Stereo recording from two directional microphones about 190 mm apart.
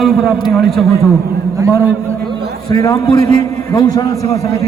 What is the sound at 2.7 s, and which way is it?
A man's voice, 20° left (ahead or behind).